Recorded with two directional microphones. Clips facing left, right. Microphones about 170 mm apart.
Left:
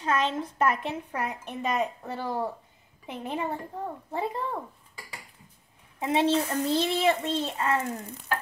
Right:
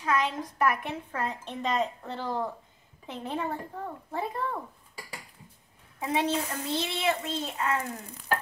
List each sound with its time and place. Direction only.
0.0 s a woman's voice: 25° left (ahead or behind)
5.9 s a woman's voice: 25° left (ahead or behind)
6.7 s a child's voice: 35° left (ahead or behind)